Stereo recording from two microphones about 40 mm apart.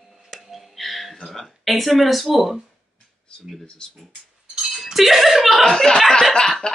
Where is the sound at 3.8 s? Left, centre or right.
Left.